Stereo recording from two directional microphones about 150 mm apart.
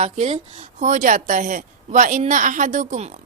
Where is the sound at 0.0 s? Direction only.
50° right (ahead or behind).